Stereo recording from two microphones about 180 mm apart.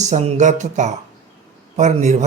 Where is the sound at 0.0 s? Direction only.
40° right (ahead or behind).